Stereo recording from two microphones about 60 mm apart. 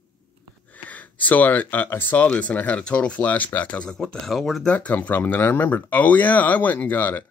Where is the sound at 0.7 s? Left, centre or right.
Left; by 4.6 s centre.